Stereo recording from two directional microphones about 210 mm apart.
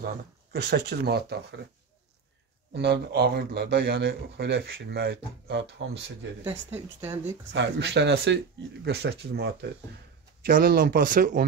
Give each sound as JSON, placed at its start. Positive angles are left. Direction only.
{"t": 0.0, "sound": "speech", "side_deg": -50}
{"t": 2.7, "sound": "speech", "side_deg": -50}
{"t": 6.7, "sound": "speech", "side_deg": -10}
{"t": 7.5, "sound": "speech", "side_deg": -55}